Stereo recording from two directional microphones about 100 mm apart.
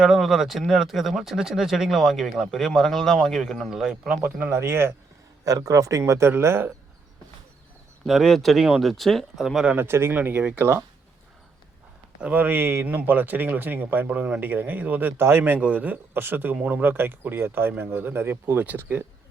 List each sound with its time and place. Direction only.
0.0 s speech: 5° right (ahead or behind)
4.4 s speech: 25° right (ahead or behind)
5.5 s speech: 35° right (ahead or behind)
8.0 s speech: centre (ahead or behind)
9.7 s speech: 25° right (ahead or behind)
12.2 s speech: 15° right (ahead or behind)